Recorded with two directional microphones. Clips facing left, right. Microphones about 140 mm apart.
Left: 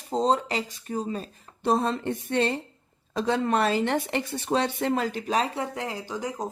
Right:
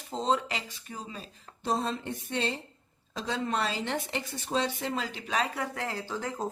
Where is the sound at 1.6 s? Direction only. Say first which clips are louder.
Left 6 dB; 60° left (ahead or behind).